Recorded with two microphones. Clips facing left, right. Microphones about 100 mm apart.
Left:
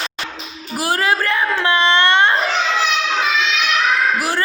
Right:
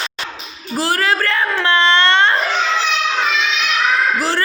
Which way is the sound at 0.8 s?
20° left (ahead or behind).